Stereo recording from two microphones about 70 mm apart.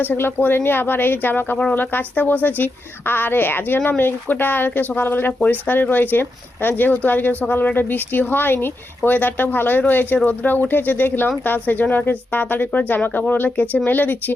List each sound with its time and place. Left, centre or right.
0.0 s speech: left